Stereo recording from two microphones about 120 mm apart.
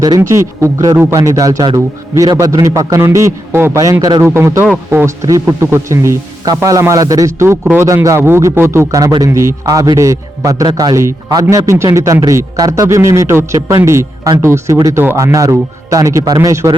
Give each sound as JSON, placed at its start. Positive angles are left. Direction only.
{"t": 0.2, "sound": "a man's voice", "side_deg": -20}